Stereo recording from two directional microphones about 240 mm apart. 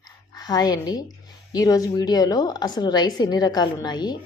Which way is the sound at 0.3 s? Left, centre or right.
Centre.